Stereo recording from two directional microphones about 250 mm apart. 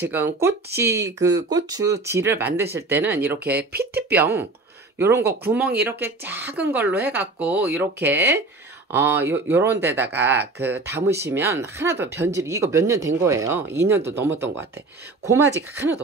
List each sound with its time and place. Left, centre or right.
0.0 s speech: centre